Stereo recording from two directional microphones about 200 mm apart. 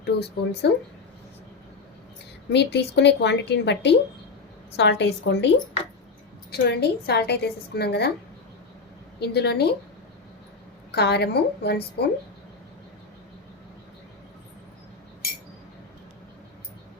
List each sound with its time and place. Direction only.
0.0 s a woman's voice: 55° left (ahead or behind)
2.5 s a woman's voice: 60° left (ahead or behind)
6.5 s a woman's voice: 55° left (ahead or behind)
9.2 s a woman's voice: 55° left (ahead or behind)
10.9 s a woman's voice: 55° left (ahead or behind)